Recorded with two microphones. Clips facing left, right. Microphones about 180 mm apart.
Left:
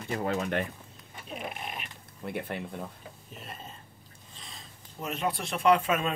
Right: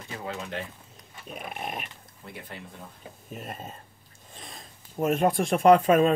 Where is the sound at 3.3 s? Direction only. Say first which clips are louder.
Right 7 dB; 50° right (ahead or behind).